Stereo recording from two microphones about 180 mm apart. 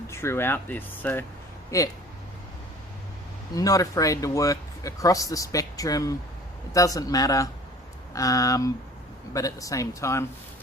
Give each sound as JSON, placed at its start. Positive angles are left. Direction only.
{"t": 0.1, "sound": "speech", "side_deg": 15}
{"t": 3.5, "sound": "speech", "side_deg": 20}